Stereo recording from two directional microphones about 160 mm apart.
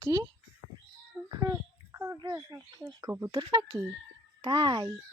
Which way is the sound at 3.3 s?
30° right (ahead or behind).